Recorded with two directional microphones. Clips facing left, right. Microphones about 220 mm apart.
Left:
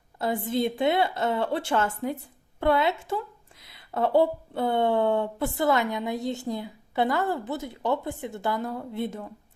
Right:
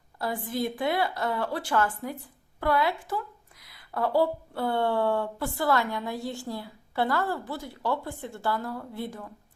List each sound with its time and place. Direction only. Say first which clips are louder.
0.2 s speech: left 4 dB; 25° left (ahead or behind)